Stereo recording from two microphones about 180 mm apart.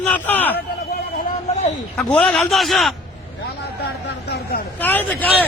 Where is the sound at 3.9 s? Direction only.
65° left (ahead or behind).